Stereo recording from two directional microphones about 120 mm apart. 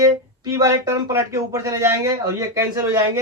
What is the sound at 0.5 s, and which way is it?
Speech, 25° right (ahead or behind).